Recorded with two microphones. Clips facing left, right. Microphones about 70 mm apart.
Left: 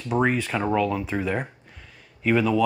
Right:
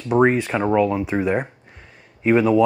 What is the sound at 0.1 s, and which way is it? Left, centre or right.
Speech, right.